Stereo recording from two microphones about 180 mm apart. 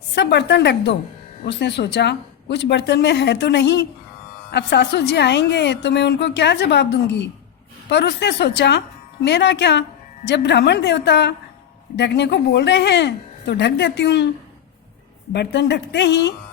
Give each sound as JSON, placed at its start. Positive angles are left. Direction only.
{"t": 0.1, "sound": "a woman's voice", "side_deg": 70}
{"t": 15.3, "sound": "a woman's voice", "side_deg": 70}